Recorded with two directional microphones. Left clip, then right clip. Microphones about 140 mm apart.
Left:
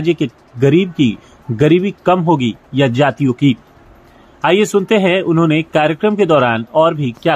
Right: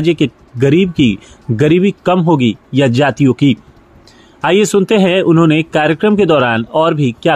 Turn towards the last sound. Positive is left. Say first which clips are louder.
# even
turn(degrees=-35)  # may be behind; listen again after turning